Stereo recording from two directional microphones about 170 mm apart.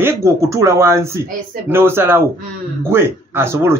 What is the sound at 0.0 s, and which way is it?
Speech, 15° right (ahead or behind).